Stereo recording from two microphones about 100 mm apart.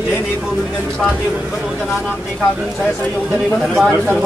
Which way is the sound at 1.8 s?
5° right (ahead or behind).